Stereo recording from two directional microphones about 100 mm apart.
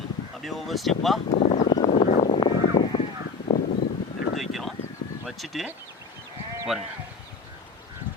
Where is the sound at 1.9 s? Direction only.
90° left.